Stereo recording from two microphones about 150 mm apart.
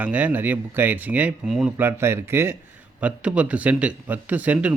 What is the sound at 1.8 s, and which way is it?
Speech, 15° right (ahead or behind).